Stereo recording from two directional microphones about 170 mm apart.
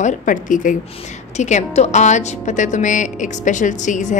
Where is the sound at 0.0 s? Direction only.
50° left (ahead or behind).